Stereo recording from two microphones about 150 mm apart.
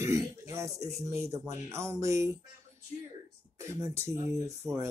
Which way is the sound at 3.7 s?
20° right (ahead or behind).